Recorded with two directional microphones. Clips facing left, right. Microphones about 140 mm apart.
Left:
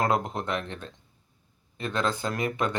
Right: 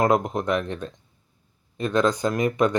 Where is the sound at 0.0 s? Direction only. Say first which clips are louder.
Right 5 dB; 15° right (ahead or behind).